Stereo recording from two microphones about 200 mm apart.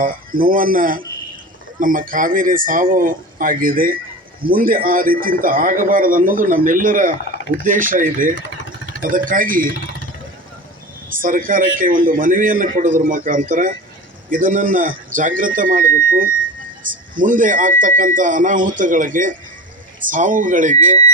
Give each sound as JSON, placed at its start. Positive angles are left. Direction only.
{"t": 0.0, "sound": "a man's voice", "side_deg": -45}
{"t": 11.1, "sound": "a man's voice", "side_deg": -40}